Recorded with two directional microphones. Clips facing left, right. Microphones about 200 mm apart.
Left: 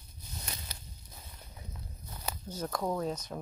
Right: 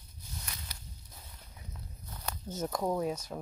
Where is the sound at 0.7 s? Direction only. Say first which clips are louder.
Left 2 dB; 25° left (ahead or behind).